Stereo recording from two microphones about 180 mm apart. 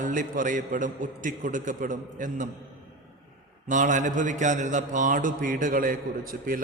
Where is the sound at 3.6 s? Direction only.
45° right (ahead or behind).